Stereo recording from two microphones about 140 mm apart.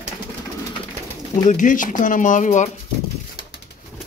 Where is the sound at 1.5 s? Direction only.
65° left (ahead or behind).